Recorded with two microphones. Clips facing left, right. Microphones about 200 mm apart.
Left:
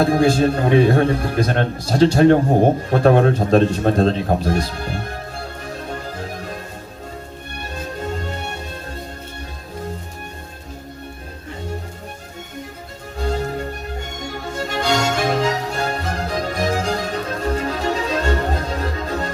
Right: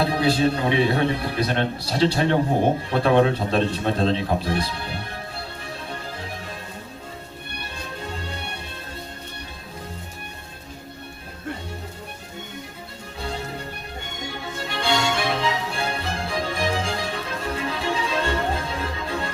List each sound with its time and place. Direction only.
0.0 s a man's voice: 45° left (ahead or behind)
2.9 s a sound: 45° left (ahead or behind)
7.6 s music: 45° left (ahead or behind)
13.1 s music: 45° left (ahead or behind)